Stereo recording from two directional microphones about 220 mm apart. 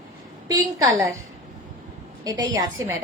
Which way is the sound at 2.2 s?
15° right (ahead or behind).